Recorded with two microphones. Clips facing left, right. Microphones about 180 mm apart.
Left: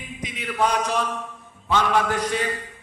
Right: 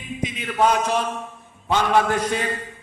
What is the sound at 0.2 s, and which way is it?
A man's voice, 25° right (ahead or behind).